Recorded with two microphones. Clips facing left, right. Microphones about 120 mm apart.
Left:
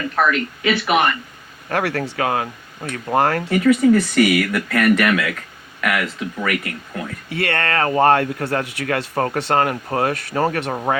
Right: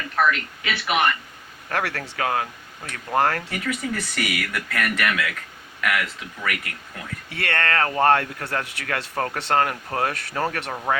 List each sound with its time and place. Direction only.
0.2 s speech: 35° left (ahead or behind)
1.7 s speech: 15° left (ahead or behind)
3.5 s speech: 35° left (ahead or behind)
7.3 s speech: 10° left (ahead or behind)
10.7 s speech: 25° left (ahead or behind)